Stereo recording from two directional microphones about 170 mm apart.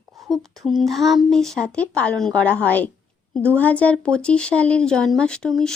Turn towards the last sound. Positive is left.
turn(degrees=0)  # may be behind; listen again after turning